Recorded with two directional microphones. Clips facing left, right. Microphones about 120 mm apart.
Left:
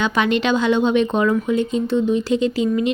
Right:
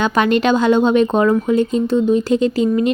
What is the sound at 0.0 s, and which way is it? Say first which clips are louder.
A woman's voice: right 4 dB; 45° right (ahead or behind).